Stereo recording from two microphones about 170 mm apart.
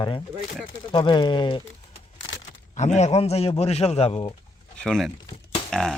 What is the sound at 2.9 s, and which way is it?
Speech, 40° left (ahead or behind).